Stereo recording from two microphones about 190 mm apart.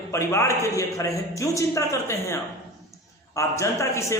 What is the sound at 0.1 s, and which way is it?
A man's voice, 15° left (ahead or behind).